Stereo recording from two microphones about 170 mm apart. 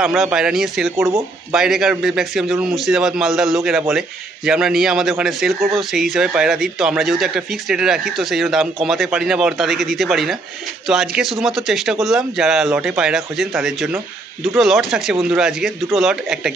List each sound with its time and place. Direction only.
0.0 s speech: centre (ahead or behind)
0.9 s speech: 15° right (ahead or behind)
1.5 s speech: 5° right (ahead or behind)